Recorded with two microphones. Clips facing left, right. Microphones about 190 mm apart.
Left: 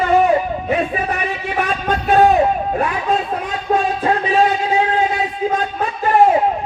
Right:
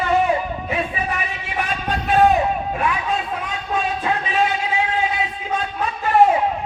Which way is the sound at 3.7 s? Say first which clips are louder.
Left 7 dB; 50° left (ahead or behind).